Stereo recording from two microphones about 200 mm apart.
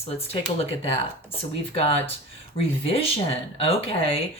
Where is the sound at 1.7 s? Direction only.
30° left (ahead or behind).